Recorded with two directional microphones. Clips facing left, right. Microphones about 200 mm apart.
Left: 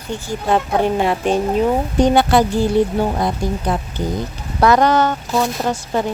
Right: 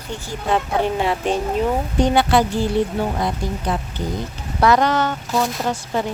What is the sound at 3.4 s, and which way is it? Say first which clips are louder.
Speech: left 4 dB; 45° left (ahead or behind).